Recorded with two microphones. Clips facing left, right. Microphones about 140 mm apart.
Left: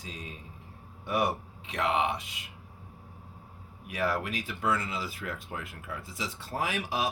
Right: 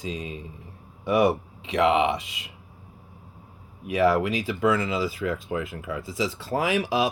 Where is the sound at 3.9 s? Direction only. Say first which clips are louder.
Right 10 dB; 90° right.